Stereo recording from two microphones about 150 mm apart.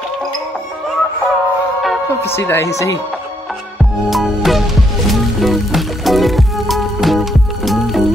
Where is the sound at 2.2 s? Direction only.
15° left (ahead or behind).